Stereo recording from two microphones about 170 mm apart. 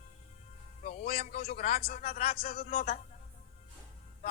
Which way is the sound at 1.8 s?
60° left (ahead or behind).